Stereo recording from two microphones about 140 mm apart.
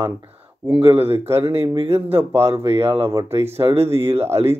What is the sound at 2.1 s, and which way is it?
Speech, 15° right (ahead or behind).